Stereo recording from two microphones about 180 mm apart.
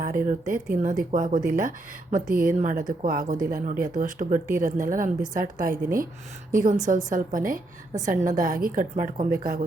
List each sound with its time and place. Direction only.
0.0 s speech: 50° right (ahead or behind)